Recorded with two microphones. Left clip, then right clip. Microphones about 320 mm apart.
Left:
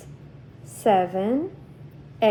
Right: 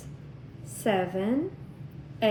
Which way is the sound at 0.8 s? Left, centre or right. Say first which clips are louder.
Left 7 dB; centre.